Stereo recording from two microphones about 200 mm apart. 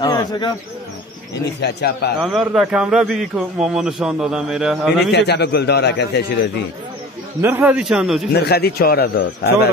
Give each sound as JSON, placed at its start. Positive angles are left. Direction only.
{"t": 0.0, "sound": "speech", "side_deg": 20}
{"t": 1.3, "sound": "a man's voice", "side_deg": 55}
{"t": 2.2, "sound": "a man's voice", "side_deg": 0}
{"t": 5.1, "sound": "a man's voice", "side_deg": 55}
{"t": 7.4, "sound": "a man's voice", "side_deg": -10}
{"t": 8.3, "sound": "a man's voice", "side_deg": 55}